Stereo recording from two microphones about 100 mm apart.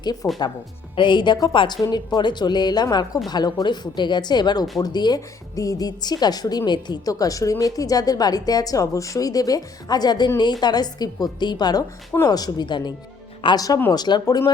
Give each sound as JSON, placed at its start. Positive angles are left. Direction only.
{"t": 0.0, "sound": "speech", "side_deg": 40}
{"t": 13.4, "sound": "speech", "side_deg": 60}
{"t": 13.9, "sound": "speech", "side_deg": 45}